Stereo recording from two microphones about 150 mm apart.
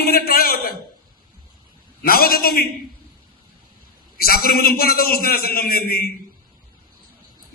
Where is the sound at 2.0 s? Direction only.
80° left.